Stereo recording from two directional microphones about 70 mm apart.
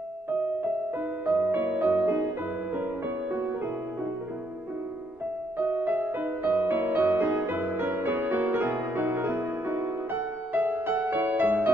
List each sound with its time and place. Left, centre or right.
0.3 s music: right
5.6 s music: right